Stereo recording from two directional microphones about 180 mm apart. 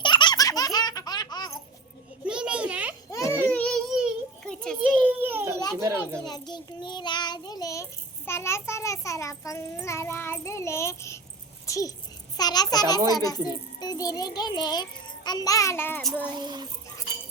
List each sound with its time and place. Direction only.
0.0 s baby laughter: 25° left (ahead or behind)
2.2 s a sound: 5° right (ahead or behind)
3.5 s child singing: 5° left (ahead or behind)
4.8 s children playing: 10° right (ahead or behind)
5.8 s speech: 15° right (ahead or behind)
6.2 s child singing: 25° left (ahead or behind)
8.3 s a child's voice: 15° left (ahead or behind)
16.4 s child singing: 25° right (ahead or behind)